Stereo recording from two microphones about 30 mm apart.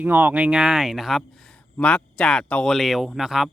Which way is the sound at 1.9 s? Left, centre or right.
Left.